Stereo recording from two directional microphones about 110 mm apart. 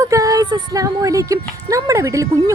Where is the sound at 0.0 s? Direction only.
30° right (ahead or behind).